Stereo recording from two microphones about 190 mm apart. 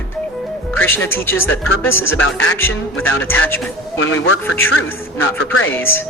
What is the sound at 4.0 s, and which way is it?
Speech, 90° left.